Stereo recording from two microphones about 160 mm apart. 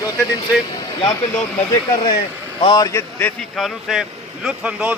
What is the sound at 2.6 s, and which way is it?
Speech, 25° left (ahead or behind).